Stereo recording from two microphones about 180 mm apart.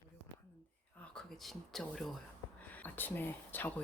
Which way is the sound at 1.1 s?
Centre (ahead or behind).